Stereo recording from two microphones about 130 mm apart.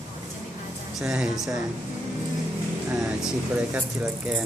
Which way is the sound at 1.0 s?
5° right (ahead or behind).